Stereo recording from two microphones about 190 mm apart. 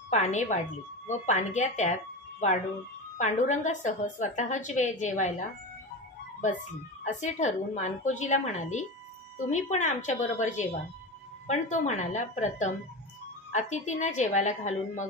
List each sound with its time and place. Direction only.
0.1 s a woman's voice: 40° left (ahead or behind)
7.1 s a woman's voice: 40° left (ahead or behind)